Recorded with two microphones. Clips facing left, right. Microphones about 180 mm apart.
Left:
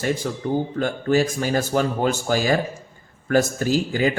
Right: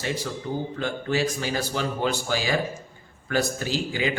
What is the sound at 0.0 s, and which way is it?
Speech, 50° left (ahead or behind).